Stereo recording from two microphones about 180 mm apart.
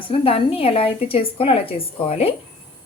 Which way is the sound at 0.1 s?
30° left (ahead or behind).